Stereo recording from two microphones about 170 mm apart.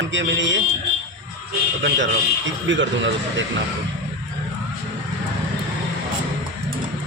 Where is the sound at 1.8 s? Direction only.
90° right.